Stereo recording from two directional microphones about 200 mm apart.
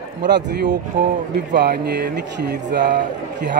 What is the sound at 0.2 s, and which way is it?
Speech, 60° right (ahead or behind).